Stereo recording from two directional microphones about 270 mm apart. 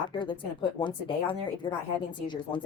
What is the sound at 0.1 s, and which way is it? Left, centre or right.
A woman's voice, centre.